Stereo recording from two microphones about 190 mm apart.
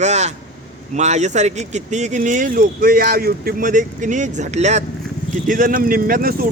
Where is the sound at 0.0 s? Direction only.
35° right (ahead or behind).